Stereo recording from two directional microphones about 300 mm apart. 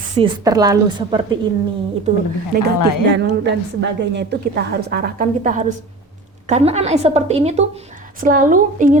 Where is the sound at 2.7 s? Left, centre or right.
Left.